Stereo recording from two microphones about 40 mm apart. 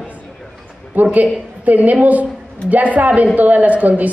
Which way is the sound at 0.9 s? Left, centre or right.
Right.